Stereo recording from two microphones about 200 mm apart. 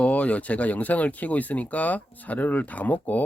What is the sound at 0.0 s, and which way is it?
Speech, 5° left (ahead or behind).